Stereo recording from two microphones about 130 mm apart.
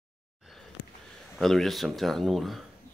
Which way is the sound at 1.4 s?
Centre (ahead or behind).